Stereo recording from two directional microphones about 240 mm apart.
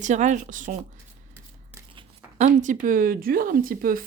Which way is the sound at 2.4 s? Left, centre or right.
Right.